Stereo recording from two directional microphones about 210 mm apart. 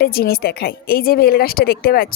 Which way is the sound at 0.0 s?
45° left (ahead or behind).